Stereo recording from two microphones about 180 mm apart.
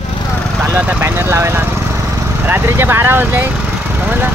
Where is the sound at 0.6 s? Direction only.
10° right (ahead or behind).